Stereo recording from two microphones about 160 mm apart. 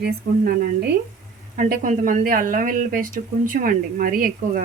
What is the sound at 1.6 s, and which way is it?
Speech, 65° right (ahead or behind).